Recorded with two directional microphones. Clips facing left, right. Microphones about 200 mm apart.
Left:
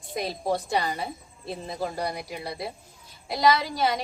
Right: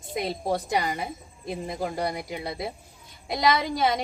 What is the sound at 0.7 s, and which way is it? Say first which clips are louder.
A woman's voice: even; 20° right (ahead or behind).